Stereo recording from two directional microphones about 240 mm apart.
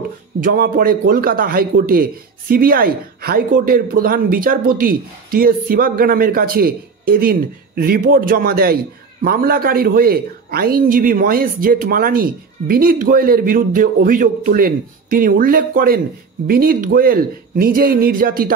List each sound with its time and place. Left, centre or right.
0.4 s a man's voice: right